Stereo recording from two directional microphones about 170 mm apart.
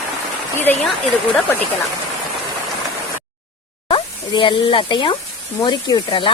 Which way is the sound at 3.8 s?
30° left (ahead or behind).